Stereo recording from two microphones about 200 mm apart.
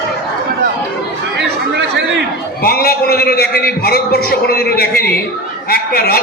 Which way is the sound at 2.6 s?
50° left (ahead or behind).